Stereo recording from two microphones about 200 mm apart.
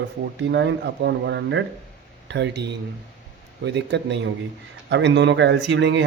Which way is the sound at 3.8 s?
60° right (ahead or behind).